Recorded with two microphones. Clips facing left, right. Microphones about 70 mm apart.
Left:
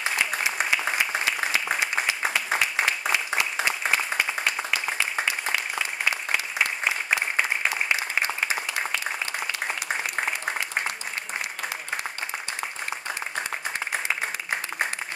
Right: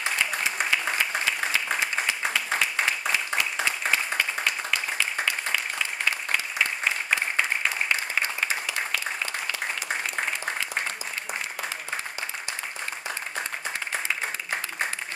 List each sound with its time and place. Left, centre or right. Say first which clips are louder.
0.3 s applause: left 1 dB; centre
3.9 s applause: left 1 dB; centre